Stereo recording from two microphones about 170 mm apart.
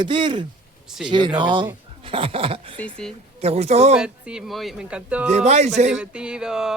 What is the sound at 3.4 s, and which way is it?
Speech, 40° right (ahead or behind).